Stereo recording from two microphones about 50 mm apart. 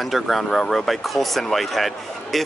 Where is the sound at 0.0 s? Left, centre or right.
Centre.